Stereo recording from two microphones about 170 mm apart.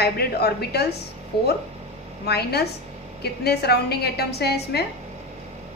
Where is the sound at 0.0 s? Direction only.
70° left (ahead or behind).